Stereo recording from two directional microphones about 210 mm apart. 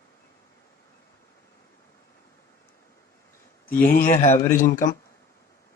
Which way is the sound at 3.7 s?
45° left (ahead or behind).